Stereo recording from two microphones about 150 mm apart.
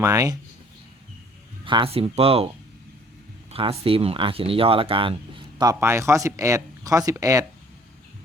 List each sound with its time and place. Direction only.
0.0 s speech: 20° right (ahead or behind)
1.6 s speech: 35° right (ahead or behind)
3.5 s speech: 40° right (ahead or behind); by 7.4 s 20° right (ahead or behind)